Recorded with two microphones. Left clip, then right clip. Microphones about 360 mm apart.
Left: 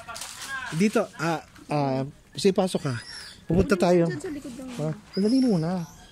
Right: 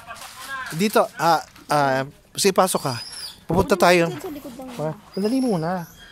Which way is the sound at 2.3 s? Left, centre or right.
Centre.